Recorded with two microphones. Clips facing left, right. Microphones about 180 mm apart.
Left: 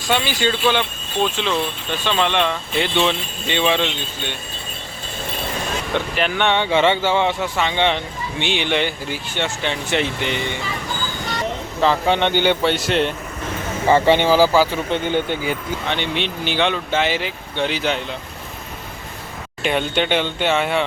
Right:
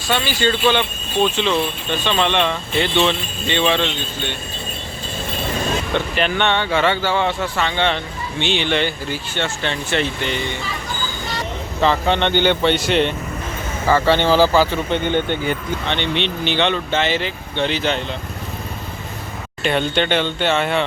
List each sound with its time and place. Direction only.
0.1 s speech: 15° left (ahead or behind)
5.9 s speech: 5° left (ahead or behind)
11.8 s speech: 5° left (ahead or behind)
13.8 s speech: 20° left (ahead or behind)
19.6 s speech: 10° left (ahead or behind)